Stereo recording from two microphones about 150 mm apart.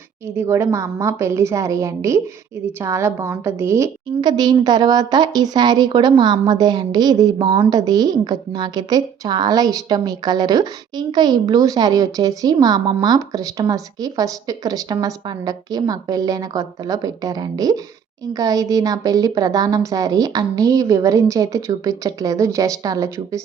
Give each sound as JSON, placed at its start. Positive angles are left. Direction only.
{"t": 0.3, "sound": "a woman's voice", "side_deg": -20}
{"t": 4.2, "sound": "a woman's voice", "side_deg": -30}